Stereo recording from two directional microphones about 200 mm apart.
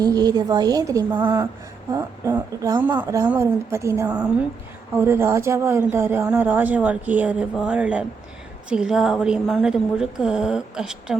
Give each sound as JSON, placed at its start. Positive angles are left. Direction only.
{"t": 0.0, "sound": "a woman's voice", "side_deg": -20}